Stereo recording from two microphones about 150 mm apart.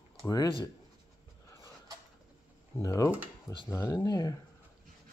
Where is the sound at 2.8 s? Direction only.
20° left (ahead or behind).